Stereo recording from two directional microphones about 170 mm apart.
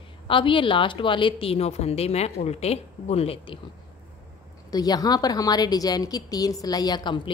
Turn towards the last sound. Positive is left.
turn(degrees=25)  # may be behind; listen again after turning